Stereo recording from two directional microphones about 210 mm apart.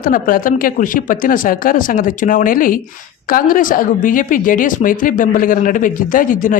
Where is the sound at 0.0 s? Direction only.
40° left (ahead or behind).